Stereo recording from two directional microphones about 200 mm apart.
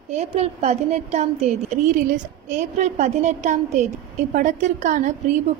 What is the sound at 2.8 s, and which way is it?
A woman's voice, 35° right (ahead or behind).